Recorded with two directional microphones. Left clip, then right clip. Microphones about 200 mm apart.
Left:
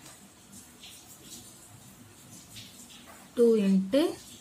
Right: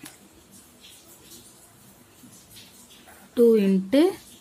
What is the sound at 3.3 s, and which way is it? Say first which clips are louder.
Speech: right 5 dB; 30° right (ahead or behind).